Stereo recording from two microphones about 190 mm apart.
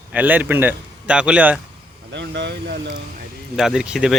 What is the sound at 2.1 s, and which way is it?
Speech, 65° right (ahead or behind).